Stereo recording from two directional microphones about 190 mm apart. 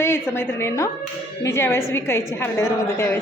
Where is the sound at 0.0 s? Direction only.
10° left (ahead or behind).